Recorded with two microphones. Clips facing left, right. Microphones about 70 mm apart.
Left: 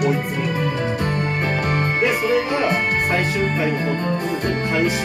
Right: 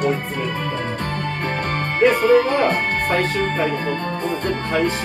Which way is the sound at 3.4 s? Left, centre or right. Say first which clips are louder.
Even; right.